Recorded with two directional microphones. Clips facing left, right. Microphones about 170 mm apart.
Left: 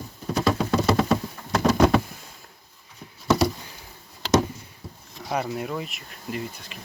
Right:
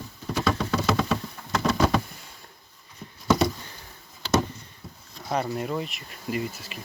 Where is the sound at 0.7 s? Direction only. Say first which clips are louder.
Left 4 dB; 35° left (ahead or behind).